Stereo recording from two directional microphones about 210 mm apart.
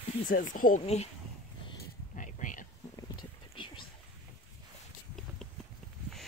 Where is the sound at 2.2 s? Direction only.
40° left (ahead or behind).